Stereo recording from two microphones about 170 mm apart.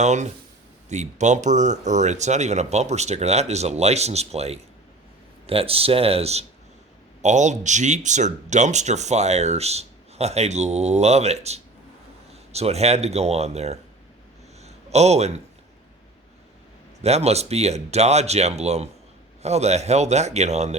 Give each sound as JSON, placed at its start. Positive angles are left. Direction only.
{"t": 0.0, "sound": "speech", "side_deg": -45}
{"t": 14.6, "sound": "a sound", "side_deg": -40}
{"t": 17.0, "sound": "speech", "side_deg": -40}